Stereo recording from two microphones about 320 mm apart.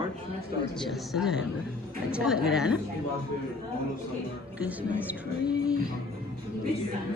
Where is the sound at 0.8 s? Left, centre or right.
Centre.